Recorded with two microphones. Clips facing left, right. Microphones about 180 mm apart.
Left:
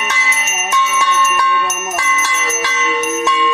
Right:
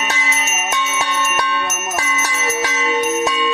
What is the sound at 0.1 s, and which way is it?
Music, 35° right (ahead or behind).